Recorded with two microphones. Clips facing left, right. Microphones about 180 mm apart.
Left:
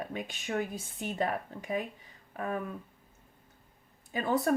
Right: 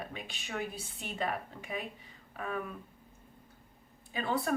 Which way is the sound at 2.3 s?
40° left (ahead or behind).